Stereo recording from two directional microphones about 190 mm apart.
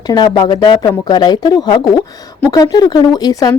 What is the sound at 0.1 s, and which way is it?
Speech, 20° left (ahead or behind).